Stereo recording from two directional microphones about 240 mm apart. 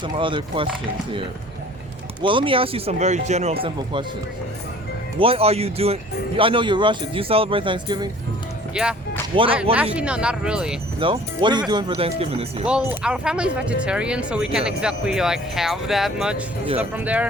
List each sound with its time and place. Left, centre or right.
0.0 s speech: right
2.2 s speech: right
5.2 s speech: right
8.7 s speech: centre
9.3 s speech: right
9.9 s speech: centre
11.0 s speech: centre
12.6 s speech: centre